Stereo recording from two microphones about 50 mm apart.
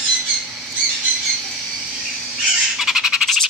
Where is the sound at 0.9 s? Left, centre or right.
Centre.